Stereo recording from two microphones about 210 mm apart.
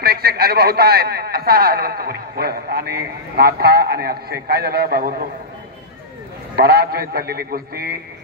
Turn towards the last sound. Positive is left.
turn(degrees=-50)  # may be behind; listen again after turning